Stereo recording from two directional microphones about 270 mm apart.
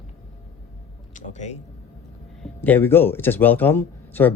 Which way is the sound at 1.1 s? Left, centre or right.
Left.